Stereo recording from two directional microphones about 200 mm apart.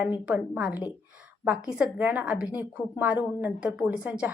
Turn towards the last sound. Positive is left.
turn(degrees=-5)  # may be behind; listen again after turning